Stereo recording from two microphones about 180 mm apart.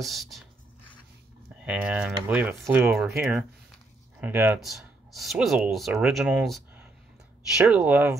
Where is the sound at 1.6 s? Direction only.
5° right (ahead or behind).